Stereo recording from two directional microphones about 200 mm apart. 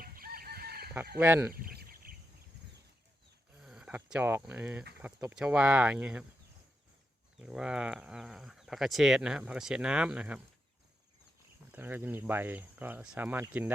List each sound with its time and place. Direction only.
0.0 s chicken: 45° right (ahead or behind)
1.2 s speech: 10° right (ahead or behind)
1.5 s a sound: 50° right (ahead or behind)
3.6 s speech: 5° right (ahead or behind)
7.3 s speech: 5° right (ahead or behind)
11.7 s speech: 10° right (ahead or behind)